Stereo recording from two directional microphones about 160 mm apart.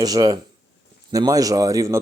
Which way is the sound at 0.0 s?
25° right (ahead or behind).